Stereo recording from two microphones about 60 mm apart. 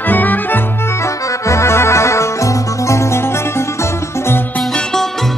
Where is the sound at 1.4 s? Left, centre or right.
Left.